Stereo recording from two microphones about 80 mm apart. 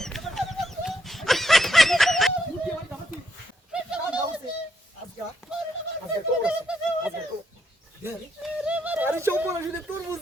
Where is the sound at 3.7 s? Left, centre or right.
Centre.